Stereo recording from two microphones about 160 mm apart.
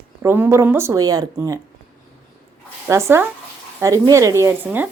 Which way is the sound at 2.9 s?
15° right (ahead or behind).